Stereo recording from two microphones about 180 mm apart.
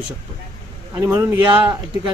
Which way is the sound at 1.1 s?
10° right (ahead or behind).